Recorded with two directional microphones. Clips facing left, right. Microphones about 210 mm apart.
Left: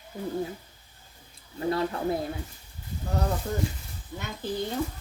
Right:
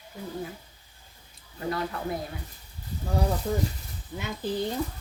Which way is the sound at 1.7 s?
30° left (ahead or behind).